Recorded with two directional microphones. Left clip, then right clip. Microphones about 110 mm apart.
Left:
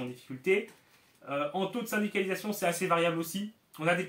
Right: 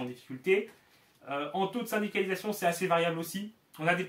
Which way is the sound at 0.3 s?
15° right (ahead or behind).